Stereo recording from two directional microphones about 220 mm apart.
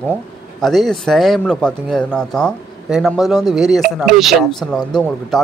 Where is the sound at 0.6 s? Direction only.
Centre (ahead or behind).